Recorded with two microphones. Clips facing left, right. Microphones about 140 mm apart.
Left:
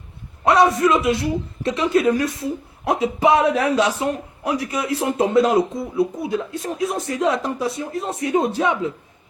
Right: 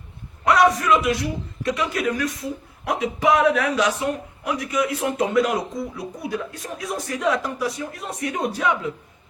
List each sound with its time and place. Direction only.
0.4 s a man's voice: 30° left (ahead or behind)